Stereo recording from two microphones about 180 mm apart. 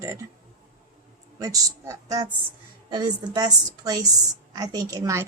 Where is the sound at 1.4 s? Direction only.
20° right (ahead or behind).